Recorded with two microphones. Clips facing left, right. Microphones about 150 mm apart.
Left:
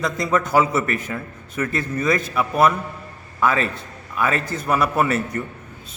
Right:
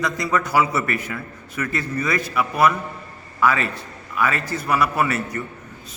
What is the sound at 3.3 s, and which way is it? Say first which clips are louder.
A man's voice: even; 20° left (ahead or behind).